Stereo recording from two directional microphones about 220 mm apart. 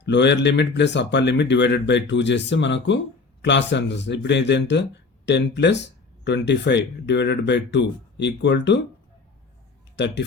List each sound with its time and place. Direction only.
0.0 s speech: 50° left (ahead or behind)
9.9 s speech: 50° left (ahead or behind)